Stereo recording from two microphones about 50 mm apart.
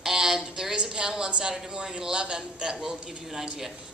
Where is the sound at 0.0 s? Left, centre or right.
Centre.